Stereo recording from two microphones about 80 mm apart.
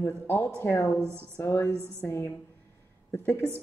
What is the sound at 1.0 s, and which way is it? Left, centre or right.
Speech, right.